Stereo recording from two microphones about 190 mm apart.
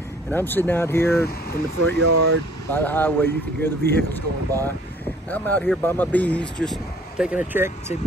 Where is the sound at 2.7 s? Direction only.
10° left (ahead or behind).